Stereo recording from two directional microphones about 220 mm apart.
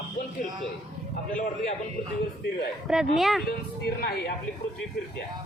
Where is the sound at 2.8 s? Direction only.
Centre (ahead or behind).